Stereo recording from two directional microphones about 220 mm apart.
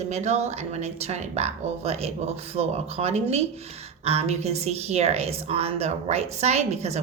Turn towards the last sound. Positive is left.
turn(degrees=-30)  # may be behind; listen again after turning